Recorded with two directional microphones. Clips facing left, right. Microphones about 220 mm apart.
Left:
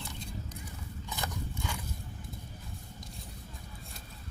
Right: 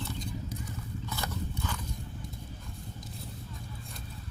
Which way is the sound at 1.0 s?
15° left (ahead or behind).